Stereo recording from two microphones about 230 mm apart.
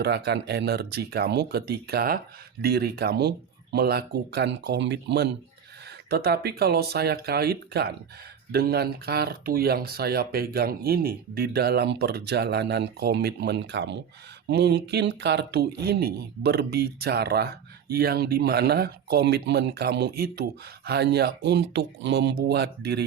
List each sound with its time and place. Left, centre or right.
0.0 s speech: right